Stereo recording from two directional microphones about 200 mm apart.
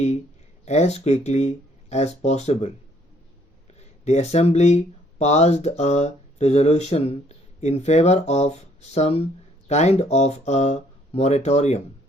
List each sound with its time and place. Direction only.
0.6 s speech: 35° left (ahead or behind)
3.8 s speech: 35° left (ahead or behind)